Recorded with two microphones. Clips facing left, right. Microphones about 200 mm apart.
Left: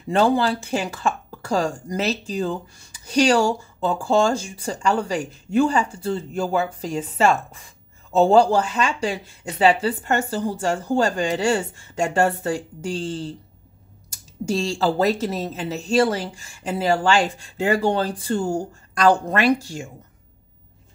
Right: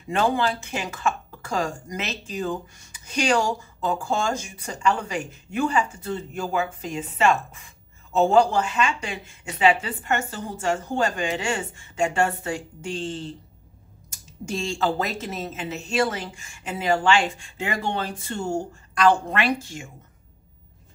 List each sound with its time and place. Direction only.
0.1 s speech: 35° left (ahead or behind)